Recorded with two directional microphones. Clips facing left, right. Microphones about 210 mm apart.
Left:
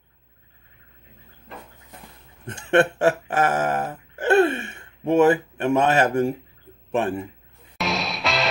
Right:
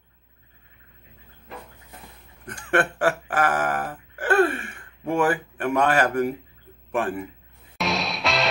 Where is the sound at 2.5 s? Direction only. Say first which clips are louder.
Left 5 dB; 25° left (ahead or behind).